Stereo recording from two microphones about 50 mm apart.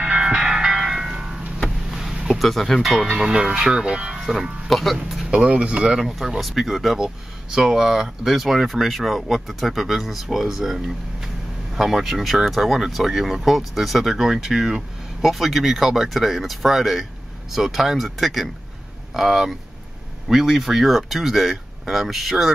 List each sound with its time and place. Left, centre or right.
0.0 s music: centre
1.9 s a sound: centre
2.2 s speech: centre
3.3 s speech: centre
4.3 s speech: centre
5.3 s speech: centre
5.9 s speech: centre